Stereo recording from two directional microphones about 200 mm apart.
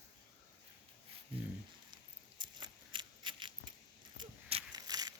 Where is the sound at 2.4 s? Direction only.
20° right (ahead or behind).